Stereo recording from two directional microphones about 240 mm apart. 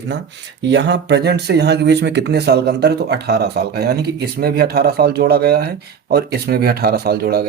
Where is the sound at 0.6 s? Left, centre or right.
Right.